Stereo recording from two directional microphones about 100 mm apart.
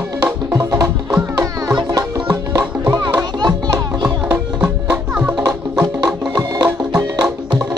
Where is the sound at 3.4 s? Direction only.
40° right (ahead or behind).